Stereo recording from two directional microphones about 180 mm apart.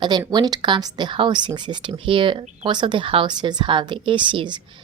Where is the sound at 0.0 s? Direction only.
25° right (ahead or behind).